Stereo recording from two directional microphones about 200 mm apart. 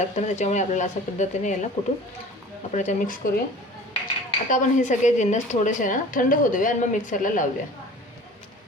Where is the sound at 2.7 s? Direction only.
40° left (ahead or behind).